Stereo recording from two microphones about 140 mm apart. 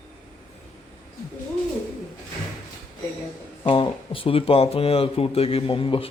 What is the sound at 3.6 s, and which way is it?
Speech, 35° left (ahead or behind).